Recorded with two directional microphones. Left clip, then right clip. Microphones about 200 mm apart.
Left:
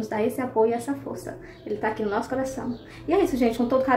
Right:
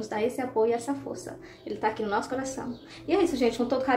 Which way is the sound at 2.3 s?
15° right (ahead or behind).